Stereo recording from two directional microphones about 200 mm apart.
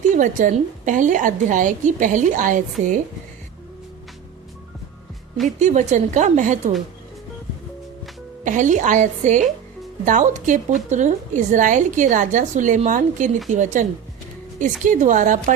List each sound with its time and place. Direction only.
0.2 s a woman's voice: 40° right (ahead or behind)
5.5 s a woman's voice: 35° right (ahead or behind)
8.4 s a woman's voice: 40° right (ahead or behind)